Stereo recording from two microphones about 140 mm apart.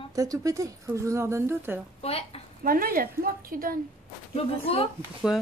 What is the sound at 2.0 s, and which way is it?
Speech, 45° left (ahead or behind).